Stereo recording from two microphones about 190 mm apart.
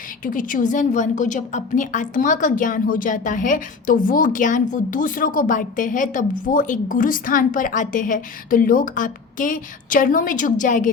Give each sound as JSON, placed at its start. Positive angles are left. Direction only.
{"t": 0.3, "sound": "a woman's voice", "side_deg": 45}